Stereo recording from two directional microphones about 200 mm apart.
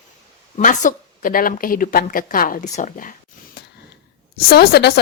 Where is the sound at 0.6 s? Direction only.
40° left (ahead or behind).